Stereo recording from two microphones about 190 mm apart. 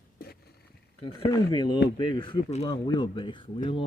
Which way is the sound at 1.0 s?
30° left (ahead or behind).